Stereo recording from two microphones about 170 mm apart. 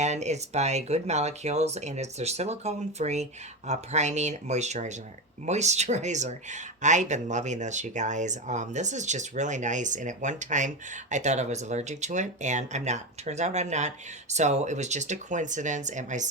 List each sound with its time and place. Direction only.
0.0 s speech: 40° right (ahead or behind)